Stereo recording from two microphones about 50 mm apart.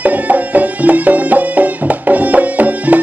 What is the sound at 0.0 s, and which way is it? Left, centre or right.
Music, right.